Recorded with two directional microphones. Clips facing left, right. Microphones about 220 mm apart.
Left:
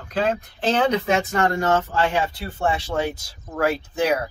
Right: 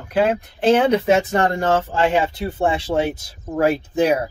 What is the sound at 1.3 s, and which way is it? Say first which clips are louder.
Speech: right 2 dB; 30° right (ahead or behind).